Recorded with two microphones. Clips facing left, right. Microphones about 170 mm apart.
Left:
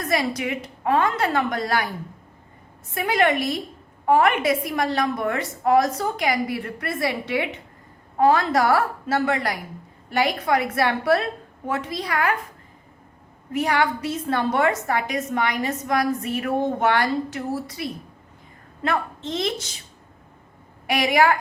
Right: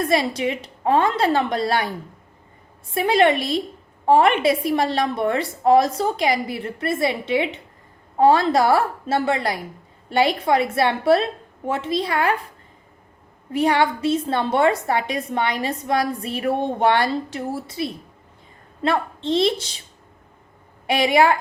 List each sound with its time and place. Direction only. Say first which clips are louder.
0.0 s a woman's voice: right 4 dB; 30° right (ahead or behind)
2.9 s a woman's voice: right 4 dB; 30° right (ahead or behind)
13.5 s a woman's voice: right 3 dB; 30° right (ahead or behind)
20.8 s a woman's voice: right 2 dB; 30° right (ahead or behind)